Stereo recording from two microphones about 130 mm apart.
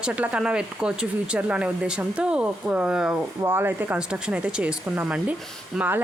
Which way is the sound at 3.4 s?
15° right (ahead or behind).